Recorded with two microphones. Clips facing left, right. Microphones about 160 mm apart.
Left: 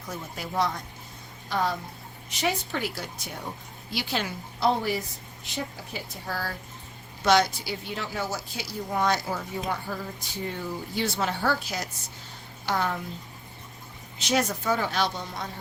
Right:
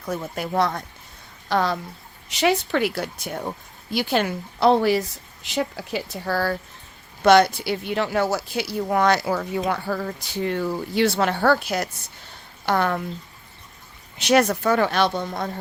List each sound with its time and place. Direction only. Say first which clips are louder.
0.1 s speech: right 8 dB; 60° right (ahead or behind)
1.5 s a woman's voice: right 5 dB; 80° right
7.2 s speech: right 7 dB; 60° right (ahead or behind)
14.2 s speech: right 8 dB; 65° right (ahead or behind)